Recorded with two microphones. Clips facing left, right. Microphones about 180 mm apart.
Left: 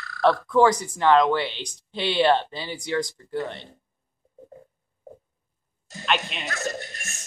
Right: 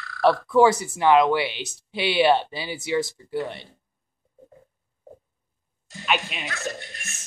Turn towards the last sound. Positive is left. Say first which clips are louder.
# left 3 dB
turn(degrees=40)  # may be behind; listen again after turning